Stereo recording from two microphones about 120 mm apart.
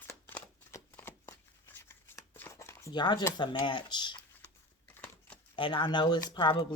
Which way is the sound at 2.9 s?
40° left (ahead or behind).